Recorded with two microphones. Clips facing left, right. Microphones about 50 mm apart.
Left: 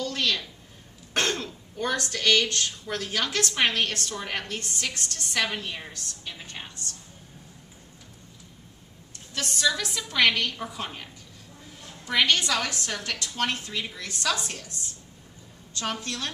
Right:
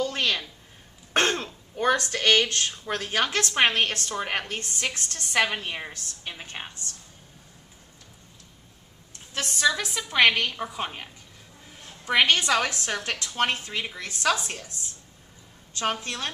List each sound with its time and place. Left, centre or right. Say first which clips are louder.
0.0 s a sound: right 2 dB; right
1.1 s speech: right 3 dB; right
9.3 s speech: right 2 dB; right
12.0 s speech: right 2 dB; right
15.7 s speech: right 3 dB; right